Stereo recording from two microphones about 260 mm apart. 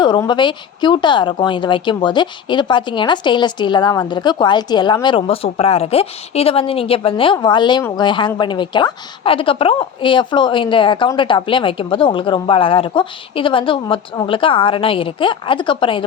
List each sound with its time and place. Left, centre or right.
0.0 s a woman's voice: centre